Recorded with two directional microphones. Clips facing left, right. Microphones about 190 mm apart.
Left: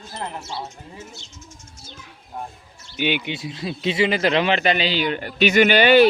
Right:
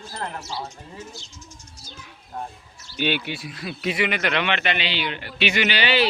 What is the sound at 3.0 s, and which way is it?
Speech, 15° left (ahead or behind).